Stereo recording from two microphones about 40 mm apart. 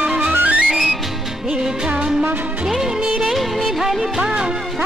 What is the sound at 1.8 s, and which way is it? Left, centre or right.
Music, right.